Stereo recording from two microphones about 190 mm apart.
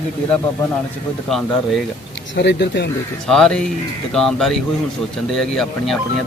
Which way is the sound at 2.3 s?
65° left (ahead or behind).